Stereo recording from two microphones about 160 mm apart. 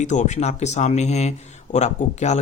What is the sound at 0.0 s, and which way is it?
Speech, 50° left (ahead or behind).